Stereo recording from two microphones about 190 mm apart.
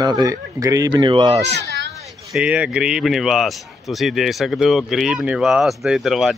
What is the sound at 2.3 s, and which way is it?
Speech, 5° right (ahead or behind).